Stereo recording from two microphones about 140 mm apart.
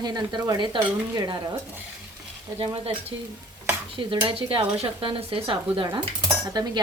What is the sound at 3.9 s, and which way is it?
Speech, 40° right (ahead or behind).